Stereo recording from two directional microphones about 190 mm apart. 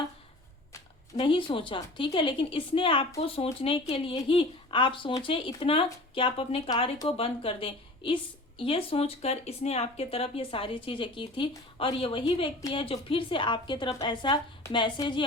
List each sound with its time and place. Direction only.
1.1 s speech: 25° left (ahead or behind)